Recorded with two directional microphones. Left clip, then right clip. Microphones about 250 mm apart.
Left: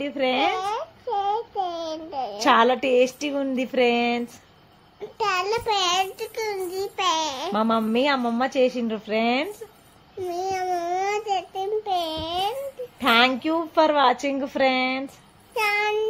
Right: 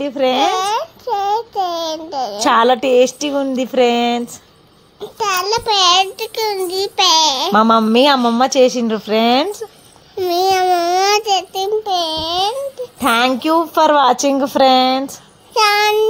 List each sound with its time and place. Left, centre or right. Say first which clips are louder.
0.0 s a child's voice: right 8 dB; right